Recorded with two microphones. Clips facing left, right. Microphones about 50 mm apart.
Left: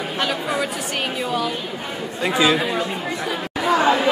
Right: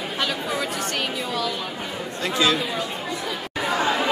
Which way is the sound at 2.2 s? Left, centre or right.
Centre.